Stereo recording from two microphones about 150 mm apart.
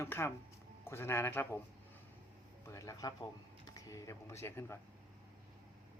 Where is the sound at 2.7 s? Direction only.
20° left (ahead or behind).